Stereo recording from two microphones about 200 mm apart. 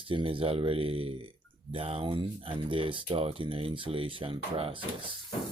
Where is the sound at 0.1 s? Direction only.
25° right (ahead or behind).